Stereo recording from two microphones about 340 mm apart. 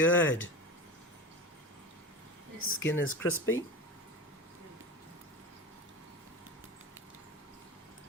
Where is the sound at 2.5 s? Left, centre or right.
Left.